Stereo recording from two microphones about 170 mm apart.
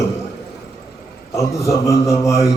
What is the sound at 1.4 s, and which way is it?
Speech, 20° left (ahead or behind).